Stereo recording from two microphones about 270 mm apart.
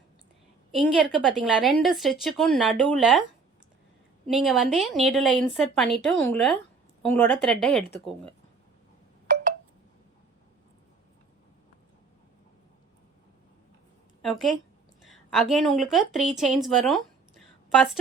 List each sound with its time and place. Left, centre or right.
1.2 s a woman's voice: centre
4.3 s a woman's voice: centre
14.2 s a woman's voice: centre
16.6 s a sound: centre